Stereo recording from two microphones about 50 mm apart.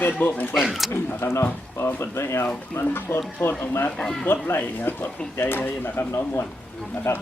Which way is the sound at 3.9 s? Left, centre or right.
Centre.